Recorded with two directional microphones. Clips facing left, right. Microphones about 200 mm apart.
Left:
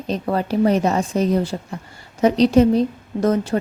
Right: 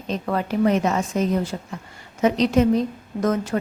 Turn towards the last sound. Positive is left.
turn(degrees=30)  # may be behind; listen again after turning